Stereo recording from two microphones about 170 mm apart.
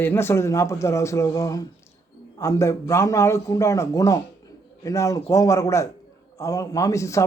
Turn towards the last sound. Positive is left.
turn(degrees=20)  # may be behind; listen again after turning